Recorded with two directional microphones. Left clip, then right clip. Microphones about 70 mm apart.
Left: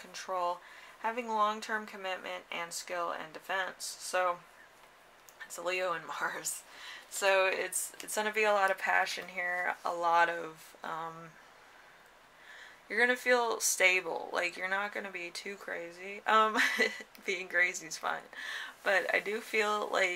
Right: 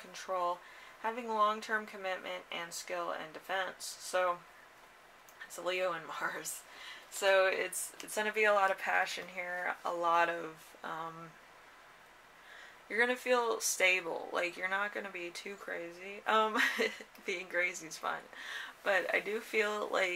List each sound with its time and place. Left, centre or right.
0.1 s speech: left
5.6 s speech: left
12.8 s speech: left